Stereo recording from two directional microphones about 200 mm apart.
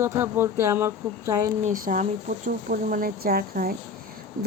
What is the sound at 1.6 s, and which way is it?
Speech, 40° right (ahead or behind).